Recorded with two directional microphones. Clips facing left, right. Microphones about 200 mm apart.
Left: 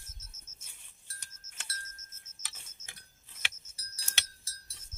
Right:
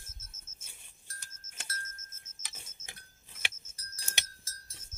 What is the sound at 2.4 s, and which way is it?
Clock, 20° right (ahead or behind).